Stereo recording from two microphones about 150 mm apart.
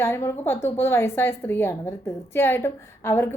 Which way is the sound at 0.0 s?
20° left (ahead or behind).